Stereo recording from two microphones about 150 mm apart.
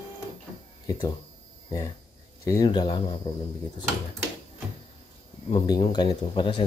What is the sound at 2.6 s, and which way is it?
Speech, 35° left (ahead or behind).